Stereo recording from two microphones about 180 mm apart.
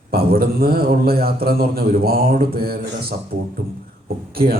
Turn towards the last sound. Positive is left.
turn(degrees=-55)  # may be behind; listen again after turning